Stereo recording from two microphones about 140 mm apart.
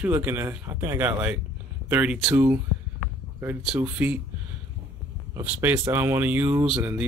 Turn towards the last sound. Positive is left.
turn(degrees=-5)  # may be behind; listen again after turning